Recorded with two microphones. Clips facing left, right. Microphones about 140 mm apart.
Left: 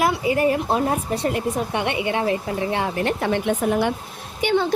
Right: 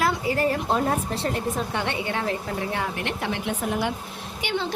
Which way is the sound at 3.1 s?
50° left (ahead or behind).